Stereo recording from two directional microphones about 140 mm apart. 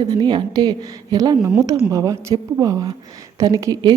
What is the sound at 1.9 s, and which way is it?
A woman's voice, 25° right (ahead or behind).